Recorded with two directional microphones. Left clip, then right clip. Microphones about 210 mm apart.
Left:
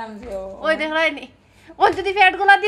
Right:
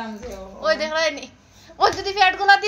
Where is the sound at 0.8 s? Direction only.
40° left (ahead or behind).